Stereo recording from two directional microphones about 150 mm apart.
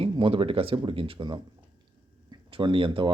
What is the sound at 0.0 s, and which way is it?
Speech, 35° right (ahead or behind).